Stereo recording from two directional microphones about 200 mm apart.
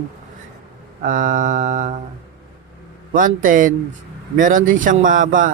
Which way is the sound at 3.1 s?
40° right (ahead or behind).